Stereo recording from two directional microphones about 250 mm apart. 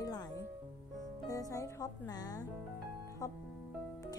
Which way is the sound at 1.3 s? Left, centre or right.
Centre.